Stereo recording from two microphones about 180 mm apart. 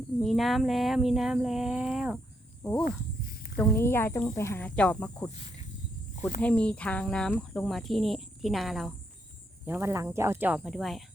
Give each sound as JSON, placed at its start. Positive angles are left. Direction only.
{"t": 0.2, "sound": "speech", "side_deg": 0}
{"t": 3.6, "sound": "speech", "side_deg": 15}
{"t": 6.4, "sound": "speech", "side_deg": 5}
{"t": 9.6, "sound": "speech", "side_deg": -15}